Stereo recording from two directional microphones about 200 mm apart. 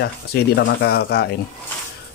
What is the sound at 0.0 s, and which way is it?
Speech, 55° left (ahead or behind).